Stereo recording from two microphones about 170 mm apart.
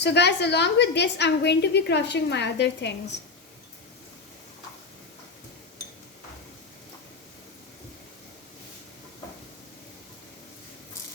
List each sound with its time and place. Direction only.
0.0 s a woman's voice: 85° left